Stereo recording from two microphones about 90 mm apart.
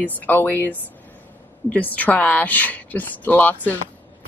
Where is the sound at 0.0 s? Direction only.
20° left (ahead or behind).